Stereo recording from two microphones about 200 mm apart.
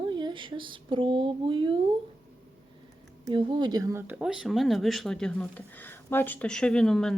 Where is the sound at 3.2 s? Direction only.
25° right (ahead or behind).